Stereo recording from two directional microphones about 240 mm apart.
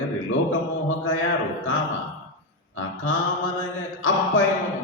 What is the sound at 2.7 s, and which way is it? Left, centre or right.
Mantra, left.